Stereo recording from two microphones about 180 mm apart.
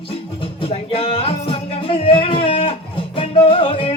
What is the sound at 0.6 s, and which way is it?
Music, 30° left (ahead or behind).